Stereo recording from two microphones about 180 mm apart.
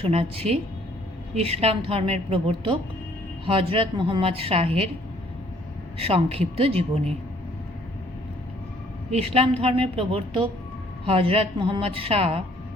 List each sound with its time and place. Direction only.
0.0 s a woman's voice: 35° right (ahead or behind)
6.0 s a woman's voice: 30° right (ahead or behind)
9.0 s a woman's voice: 35° right (ahead or behind)